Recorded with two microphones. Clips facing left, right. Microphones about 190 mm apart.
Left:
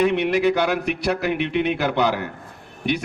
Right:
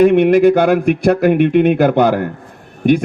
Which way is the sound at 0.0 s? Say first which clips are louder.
Right 10 dB; 50° right (ahead or behind).